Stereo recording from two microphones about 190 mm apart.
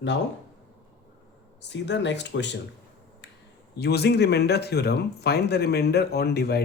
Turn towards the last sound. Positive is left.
turn(degrees=60)  # may be behind; listen again after turning